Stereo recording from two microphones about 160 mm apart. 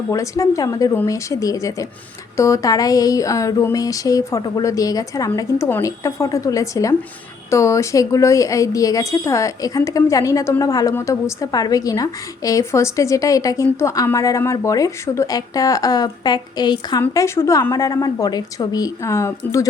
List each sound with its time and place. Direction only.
0.1 s a woman's voice: 20° left (ahead or behind)